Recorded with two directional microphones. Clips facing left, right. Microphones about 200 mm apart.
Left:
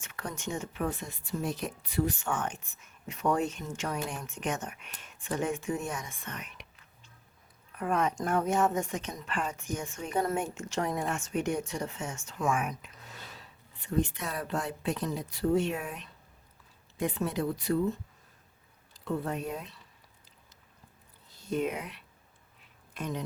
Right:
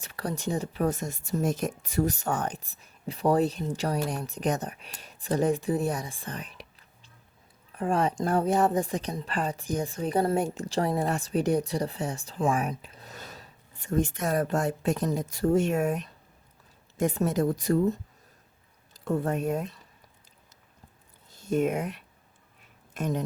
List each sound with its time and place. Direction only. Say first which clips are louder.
0.0 s a woman's voice: right 6 dB; 35° right (ahead or behind)
21.2 s a woman's voice: right 5 dB; 50° right (ahead or behind)